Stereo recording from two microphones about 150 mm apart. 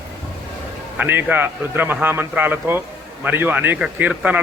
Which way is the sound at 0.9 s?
15° right (ahead or behind).